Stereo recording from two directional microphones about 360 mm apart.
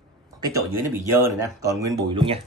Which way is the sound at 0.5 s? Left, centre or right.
Centre.